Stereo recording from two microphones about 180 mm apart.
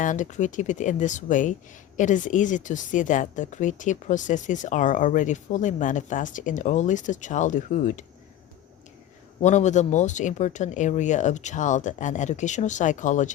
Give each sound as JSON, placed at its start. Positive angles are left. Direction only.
{"t": 0.0, "sound": "speech", "side_deg": 45}
{"t": 9.4, "sound": "speech", "side_deg": 40}